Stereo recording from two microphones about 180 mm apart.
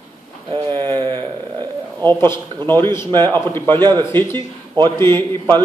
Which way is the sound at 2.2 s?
10° left (ahead or behind).